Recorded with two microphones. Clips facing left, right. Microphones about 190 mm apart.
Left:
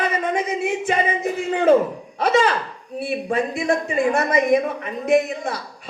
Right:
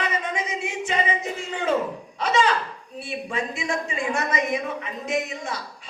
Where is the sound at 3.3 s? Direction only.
55° left (ahead or behind).